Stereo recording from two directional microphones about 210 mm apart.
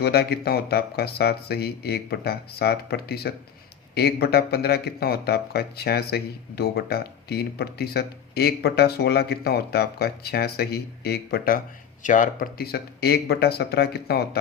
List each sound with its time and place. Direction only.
0.0 s speech: 50° left (ahead or behind)